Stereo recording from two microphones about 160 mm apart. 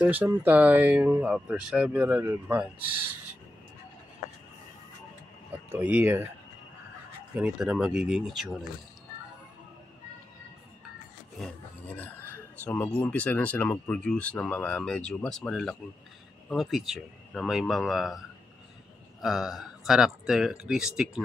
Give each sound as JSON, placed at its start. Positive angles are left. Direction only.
{"t": 0.0, "sound": "speech", "side_deg": -10}
{"t": 5.7, "sound": "speech", "side_deg": -10}
{"t": 7.3, "sound": "speech", "side_deg": -5}
{"t": 11.3, "sound": "speech", "side_deg": 5}
{"t": 19.2, "sound": "speech", "side_deg": 0}